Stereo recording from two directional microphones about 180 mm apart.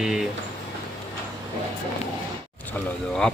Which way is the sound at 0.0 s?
Centre (ahead or behind).